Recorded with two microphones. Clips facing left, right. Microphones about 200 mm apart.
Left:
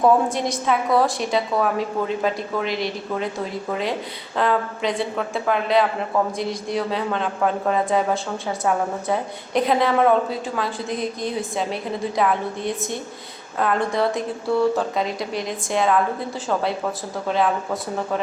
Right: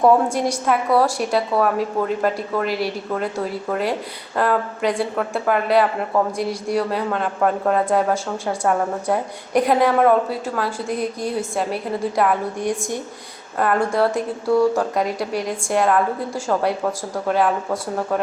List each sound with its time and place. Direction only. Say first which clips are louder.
0.0 s a woman's voice: right 2 dB; 10° right (ahead or behind)